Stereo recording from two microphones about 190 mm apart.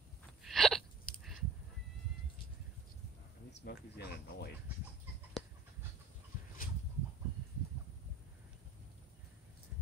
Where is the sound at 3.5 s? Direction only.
60° left (ahead or behind).